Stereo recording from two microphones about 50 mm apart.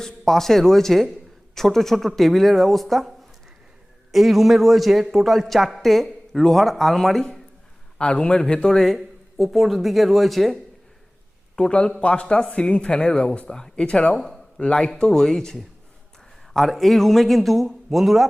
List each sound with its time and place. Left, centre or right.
0.0 s a man's voice: centre
7.9 s a man's voice: centre
11.5 s a man's voice: centre